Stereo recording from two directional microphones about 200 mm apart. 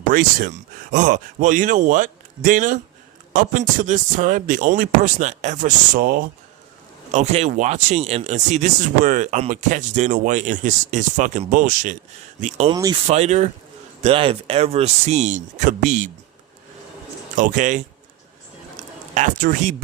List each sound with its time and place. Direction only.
0.1 s speech: 45° right (ahead or behind)
7.1 s speech: 35° right (ahead or behind)
12.7 s speech: 20° right (ahead or behind)
13.1 s speech: 35° right (ahead or behind)
17.3 s speech: 40° right (ahead or behind)
19.1 s speech: 40° right (ahead or behind)